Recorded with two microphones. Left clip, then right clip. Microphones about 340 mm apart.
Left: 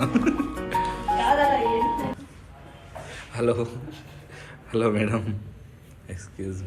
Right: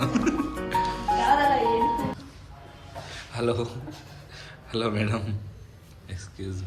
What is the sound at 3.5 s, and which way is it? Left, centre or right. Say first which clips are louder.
Speech: left 3 dB; centre.